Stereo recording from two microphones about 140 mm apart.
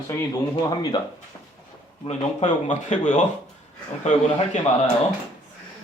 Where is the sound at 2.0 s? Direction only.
55° left (ahead or behind).